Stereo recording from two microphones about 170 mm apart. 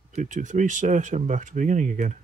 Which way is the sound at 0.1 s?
45° right (ahead or behind).